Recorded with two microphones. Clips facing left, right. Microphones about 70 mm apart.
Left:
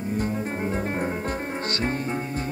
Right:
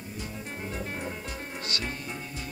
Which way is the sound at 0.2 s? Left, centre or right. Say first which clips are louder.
Left 8 dB; left.